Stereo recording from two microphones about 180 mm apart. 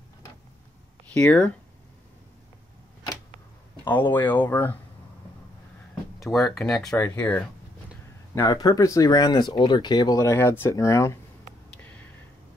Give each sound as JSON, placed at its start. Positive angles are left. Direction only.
{"t": 1.1, "sound": "speech", "side_deg": 5}
{"t": 3.8, "sound": "speech", "side_deg": 25}
{"t": 4.3, "sound": "speech", "side_deg": 10}
{"t": 6.3, "sound": "speech", "side_deg": 0}
{"t": 8.4, "sound": "speech", "side_deg": 20}